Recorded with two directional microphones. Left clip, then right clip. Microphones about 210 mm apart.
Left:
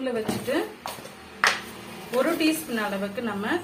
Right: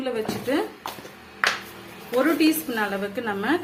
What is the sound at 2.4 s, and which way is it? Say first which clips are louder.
Speech: right 3 dB; 45° right (ahead or behind).